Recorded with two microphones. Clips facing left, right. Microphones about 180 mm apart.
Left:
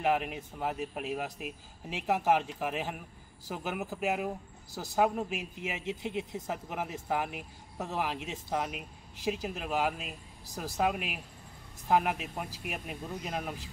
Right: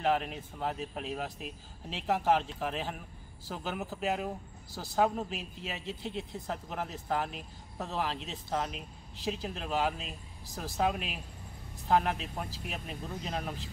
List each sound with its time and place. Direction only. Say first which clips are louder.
0.0 s speech: left 1 dB; 10° left (ahead or behind)